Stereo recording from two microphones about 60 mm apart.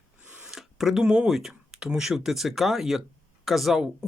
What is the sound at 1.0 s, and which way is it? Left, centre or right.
Speech, centre.